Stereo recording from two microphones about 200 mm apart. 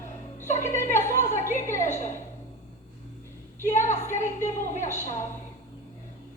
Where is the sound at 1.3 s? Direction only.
40° left (ahead or behind).